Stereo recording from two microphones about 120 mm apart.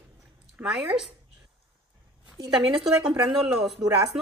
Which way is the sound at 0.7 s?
5° right (ahead or behind).